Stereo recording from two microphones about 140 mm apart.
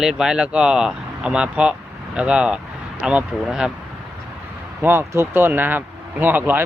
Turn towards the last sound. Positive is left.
turn(degrees=-15)  # may be behind; listen again after turning